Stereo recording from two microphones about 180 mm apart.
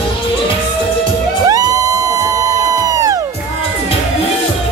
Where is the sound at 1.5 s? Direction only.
20° right (ahead or behind).